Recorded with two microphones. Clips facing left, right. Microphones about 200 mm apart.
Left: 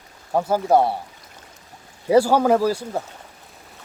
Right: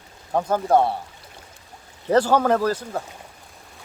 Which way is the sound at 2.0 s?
10° left (ahead or behind).